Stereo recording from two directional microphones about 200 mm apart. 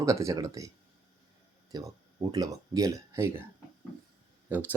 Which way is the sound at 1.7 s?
20° right (ahead or behind).